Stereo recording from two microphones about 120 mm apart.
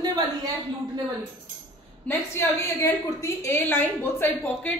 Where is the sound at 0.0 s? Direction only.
35° right (ahead or behind).